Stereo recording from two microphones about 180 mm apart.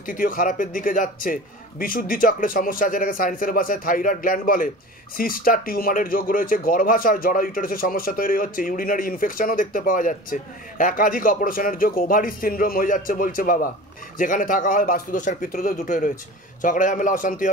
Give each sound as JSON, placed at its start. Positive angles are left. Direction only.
{"t": 0.0, "sound": "speech", "side_deg": 50}